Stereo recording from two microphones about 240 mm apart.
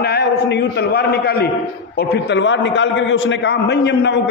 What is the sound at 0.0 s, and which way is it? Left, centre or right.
A man's voice, left.